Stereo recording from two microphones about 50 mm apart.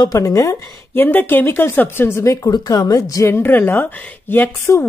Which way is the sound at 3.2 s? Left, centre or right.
Left.